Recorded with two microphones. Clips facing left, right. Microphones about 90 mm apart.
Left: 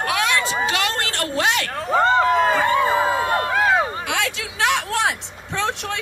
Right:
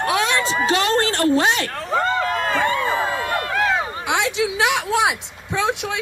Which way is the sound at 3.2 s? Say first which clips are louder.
Left 3 dB; 25° left (ahead or behind).